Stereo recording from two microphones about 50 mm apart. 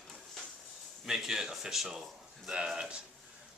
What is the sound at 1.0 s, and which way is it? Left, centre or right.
Speech, centre.